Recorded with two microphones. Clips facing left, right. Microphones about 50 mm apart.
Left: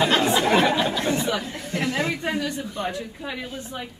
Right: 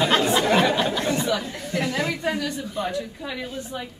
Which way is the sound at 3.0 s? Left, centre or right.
Centre.